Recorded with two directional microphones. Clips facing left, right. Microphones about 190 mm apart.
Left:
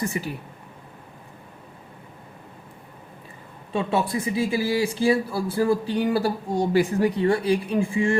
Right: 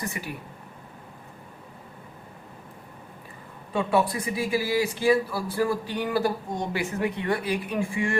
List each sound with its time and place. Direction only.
0.1 s speech: 25° left (ahead or behind)
3.7 s speech: 25° left (ahead or behind)